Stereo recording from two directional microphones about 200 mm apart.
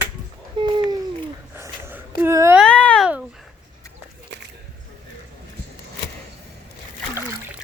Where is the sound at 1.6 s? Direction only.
10° right (ahead or behind).